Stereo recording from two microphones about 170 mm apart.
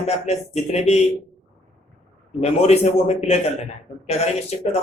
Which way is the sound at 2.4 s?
40° left (ahead or behind).